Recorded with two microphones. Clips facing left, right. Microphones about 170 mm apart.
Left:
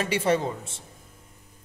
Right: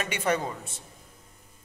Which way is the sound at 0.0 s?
30° left (ahead or behind).